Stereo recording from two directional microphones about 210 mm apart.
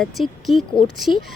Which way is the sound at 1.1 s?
20° left (ahead or behind).